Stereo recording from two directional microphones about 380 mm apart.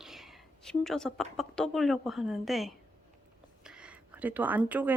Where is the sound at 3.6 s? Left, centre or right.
Centre.